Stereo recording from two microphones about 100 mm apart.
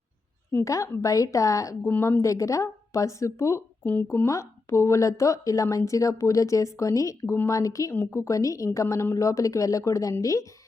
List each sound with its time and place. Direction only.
0.6 s speech: 35° left (ahead or behind)
1.9 s speech: 25° left (ahead or behind)
3.8 s speech: 20° left (ahead or behind)